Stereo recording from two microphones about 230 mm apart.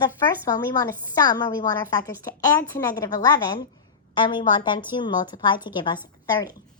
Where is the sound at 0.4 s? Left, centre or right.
Centre.